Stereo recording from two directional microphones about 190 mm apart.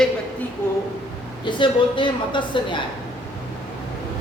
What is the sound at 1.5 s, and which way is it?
A woman's voice, 25° left (ahead or behind).